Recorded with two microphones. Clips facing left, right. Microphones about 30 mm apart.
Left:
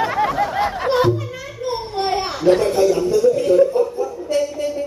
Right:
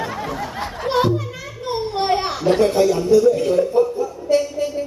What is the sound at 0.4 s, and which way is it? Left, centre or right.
Snicker, centre.